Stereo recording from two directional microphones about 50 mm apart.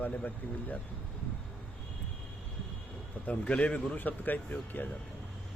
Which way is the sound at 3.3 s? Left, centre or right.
Left.